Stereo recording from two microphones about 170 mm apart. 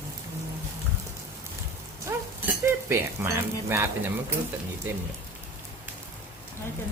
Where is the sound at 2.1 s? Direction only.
15° right (ahead or behind).